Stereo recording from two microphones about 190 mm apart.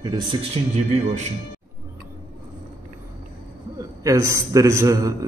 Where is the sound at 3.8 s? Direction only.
15° right (ahead or behind).